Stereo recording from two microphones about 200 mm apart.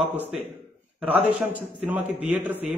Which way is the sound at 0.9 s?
10° right (ahead or behind).